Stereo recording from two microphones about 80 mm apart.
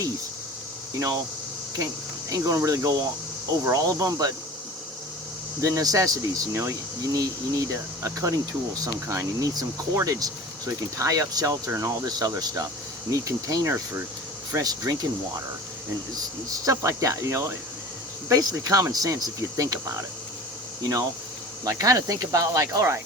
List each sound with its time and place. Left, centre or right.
0.9 s speech: right
2.3 s speech: right
5.5 s speech: right
6.5 s speech: right
16.6 s speech: right
18.3 s speech: right
21.6 s speech: right